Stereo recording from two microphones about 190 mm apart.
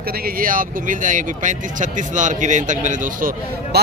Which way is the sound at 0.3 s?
50° right (ahead or behind).